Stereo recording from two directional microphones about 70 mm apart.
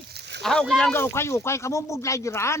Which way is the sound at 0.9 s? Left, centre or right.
Left.